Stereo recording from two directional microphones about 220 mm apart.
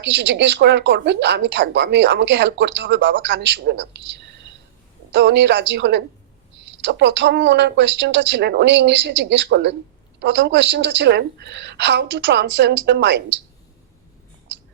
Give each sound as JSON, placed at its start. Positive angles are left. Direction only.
{"t": 0.0, "sound": "speech", "side_deg": -55}